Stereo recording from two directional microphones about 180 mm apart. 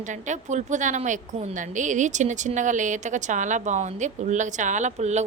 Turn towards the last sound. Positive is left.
turn(degrees=-40)  # may be behind; listen again after turning